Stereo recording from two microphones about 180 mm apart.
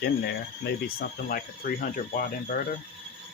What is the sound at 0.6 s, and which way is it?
Speech, 55° left (ahead or behind).